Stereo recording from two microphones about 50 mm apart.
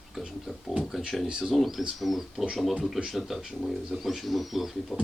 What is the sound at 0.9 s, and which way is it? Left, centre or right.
Speech, centre.